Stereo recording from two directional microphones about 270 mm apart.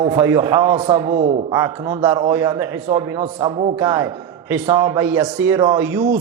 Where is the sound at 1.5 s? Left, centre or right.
Centre.